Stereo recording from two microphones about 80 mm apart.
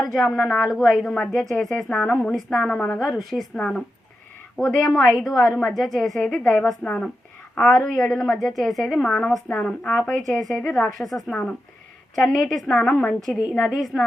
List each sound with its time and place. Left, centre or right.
0.1 s a woman's voice: centre
1.1 s speech: centre
3.0 s a woman's voice: centre
7.5 s a woman's voice: centre
11.3 s speech: centre
13.7 s a woman's voice: centre